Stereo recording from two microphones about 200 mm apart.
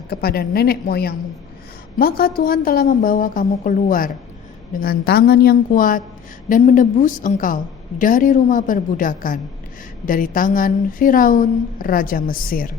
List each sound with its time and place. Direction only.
0.1 s a woman's voice: 50° left (ahead or behind)